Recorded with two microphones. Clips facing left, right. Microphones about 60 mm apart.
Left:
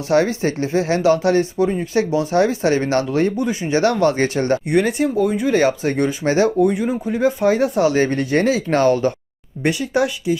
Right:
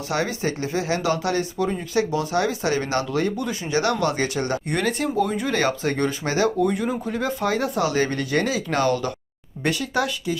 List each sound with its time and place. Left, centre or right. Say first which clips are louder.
0.1 s speech: left 8 dB; left
4.7 s speech: left 5 dB; centre
5.5 s speech: left 5 dB; left